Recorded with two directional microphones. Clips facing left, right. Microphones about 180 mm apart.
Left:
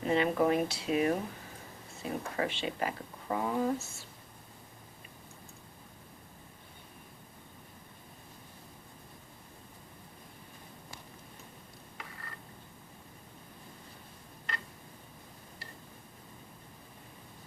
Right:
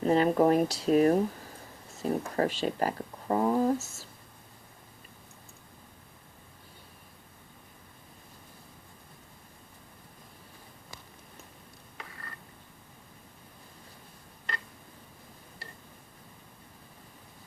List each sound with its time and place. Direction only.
0.0 s speech: 40° right (ahead or behind)